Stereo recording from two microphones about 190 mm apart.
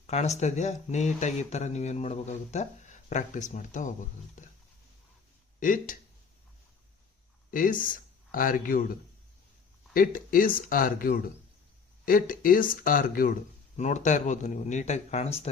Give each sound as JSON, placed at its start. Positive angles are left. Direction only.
{"t": 0.1, "sound": "speech", "side_deg": 35}
{"t": 5.5, "sound": "speech", "side_deg": 45}
{"t": 7.5, "sound": "speech", "side_deg": 45}
{"t": 9.9, "sound": "speech", "side_deg": 45}